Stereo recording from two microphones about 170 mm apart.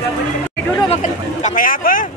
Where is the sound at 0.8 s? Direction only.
45° left (ahead or behind).